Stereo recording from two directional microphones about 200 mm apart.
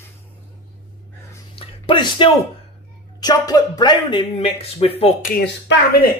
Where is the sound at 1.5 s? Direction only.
25° left (ahead or behind).